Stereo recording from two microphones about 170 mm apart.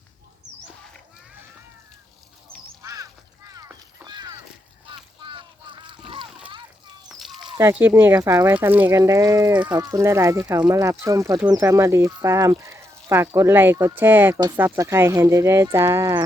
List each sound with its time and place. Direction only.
2.5 s duck: 20° right (ahead or behind)
3.5 s a sound: 20° right (ahead or behind)
4.9 s boat: 30° right (ahead or behind)
7.1 s a sound: centre (ahead or behind)
7.6 s speech: 10° right (ahead or behind)
14.3 s speech: 25° right (ahead or behind)